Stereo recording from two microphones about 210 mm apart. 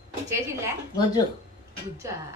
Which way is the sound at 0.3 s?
15° right (ahead or behind).